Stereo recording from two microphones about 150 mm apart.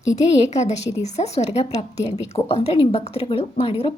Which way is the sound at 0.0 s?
20° left (ahead or behind).